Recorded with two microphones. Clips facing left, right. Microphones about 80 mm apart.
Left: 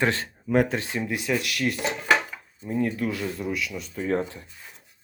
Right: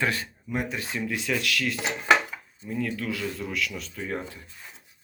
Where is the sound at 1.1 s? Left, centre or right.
Left.